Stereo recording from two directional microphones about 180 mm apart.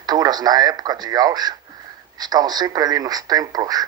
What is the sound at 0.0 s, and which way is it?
Speech, 20° right (ahead or behind).